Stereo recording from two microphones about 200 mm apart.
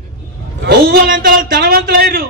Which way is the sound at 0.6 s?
50° right (ahead or behind).